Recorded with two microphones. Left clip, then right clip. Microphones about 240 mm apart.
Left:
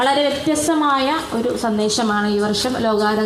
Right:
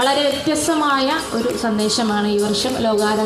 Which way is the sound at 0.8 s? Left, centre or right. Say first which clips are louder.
Even; left.